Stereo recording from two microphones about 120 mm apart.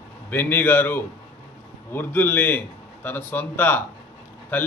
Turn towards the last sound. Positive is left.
turn(degrees=15)  # may be behind; listen again after turning